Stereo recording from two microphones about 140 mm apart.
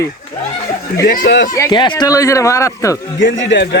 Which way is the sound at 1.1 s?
80° left.